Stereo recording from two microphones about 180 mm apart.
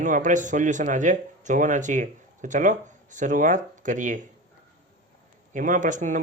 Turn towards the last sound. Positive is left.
turn(degrees=-45)  # may be behind; listen again after turning